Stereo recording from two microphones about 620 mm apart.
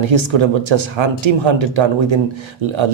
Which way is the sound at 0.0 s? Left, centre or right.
Right.